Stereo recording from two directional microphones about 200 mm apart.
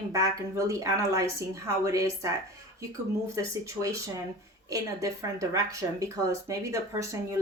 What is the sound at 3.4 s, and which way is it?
Speech, 15° right (ahead or behind).